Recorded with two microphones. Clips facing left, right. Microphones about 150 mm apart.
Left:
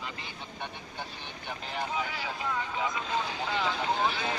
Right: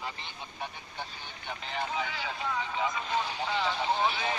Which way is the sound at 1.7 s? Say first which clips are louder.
Even; 5° left (ahead or behind).